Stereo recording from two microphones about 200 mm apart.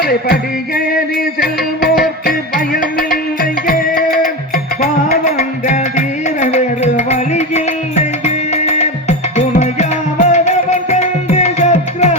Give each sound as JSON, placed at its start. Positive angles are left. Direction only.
{"t": 0.0, "sound": "music", "side_deg": 50}